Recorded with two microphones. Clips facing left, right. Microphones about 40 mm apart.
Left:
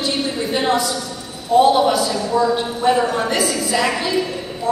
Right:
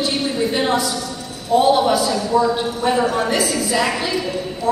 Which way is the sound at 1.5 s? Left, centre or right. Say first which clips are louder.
Left 1 dB; centre.